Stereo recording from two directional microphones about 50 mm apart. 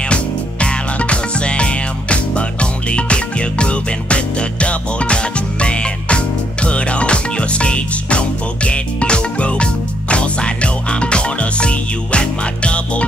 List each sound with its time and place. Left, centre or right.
0.1 s music: left